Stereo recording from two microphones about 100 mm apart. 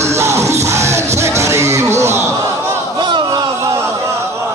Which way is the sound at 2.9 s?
50° right (ahead or behind).